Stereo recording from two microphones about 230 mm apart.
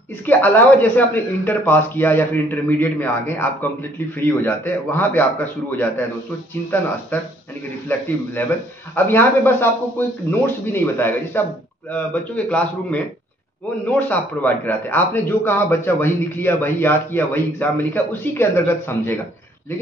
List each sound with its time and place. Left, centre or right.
0.2 s speech: centre
7.1 s a man's voice: centre